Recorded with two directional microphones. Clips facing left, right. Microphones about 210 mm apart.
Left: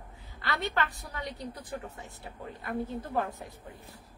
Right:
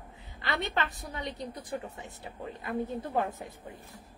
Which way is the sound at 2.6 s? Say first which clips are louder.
Right 1 dB; 20° right (ahead or behind).